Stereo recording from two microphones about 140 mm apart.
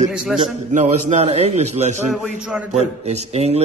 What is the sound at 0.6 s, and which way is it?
A man's voice, 60° right (ahead or behind).